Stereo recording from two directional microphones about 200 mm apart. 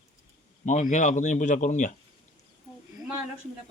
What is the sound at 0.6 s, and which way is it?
Speech, 35° left (ahead or behind).